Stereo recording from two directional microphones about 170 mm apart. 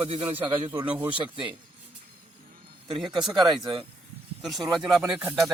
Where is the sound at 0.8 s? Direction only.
10° right (ahead or behind).